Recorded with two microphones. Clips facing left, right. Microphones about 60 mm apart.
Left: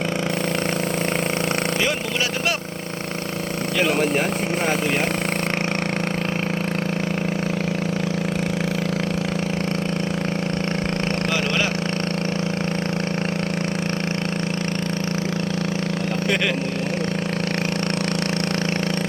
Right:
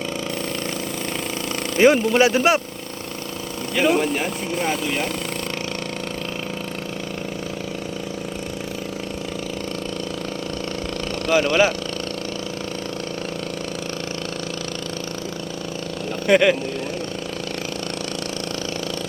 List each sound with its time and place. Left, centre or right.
1.8 s speech: right
11.3 s speech: centre
16.3 s speech: centre